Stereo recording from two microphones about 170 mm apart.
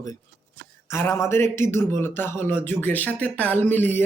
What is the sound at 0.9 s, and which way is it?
Speech, 15° left (ahead or behind).